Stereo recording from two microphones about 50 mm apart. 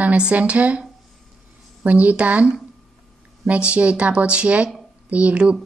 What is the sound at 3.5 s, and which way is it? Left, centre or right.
A woman's voice, right.